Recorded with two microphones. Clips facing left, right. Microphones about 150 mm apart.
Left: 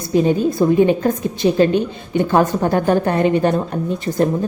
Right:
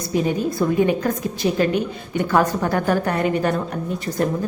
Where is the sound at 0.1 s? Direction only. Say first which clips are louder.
Left 6 dB; 25° left (ahead or behind).